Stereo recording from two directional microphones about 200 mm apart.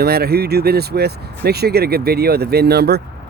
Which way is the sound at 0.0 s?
50° right (ahead or behind).